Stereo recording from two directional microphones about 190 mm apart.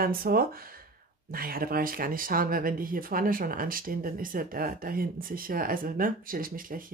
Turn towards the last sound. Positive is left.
turn(degrees=-45)  # may be behind; listen again after turning